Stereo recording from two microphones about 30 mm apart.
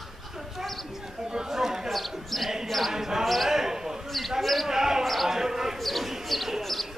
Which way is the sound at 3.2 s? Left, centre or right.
Centre.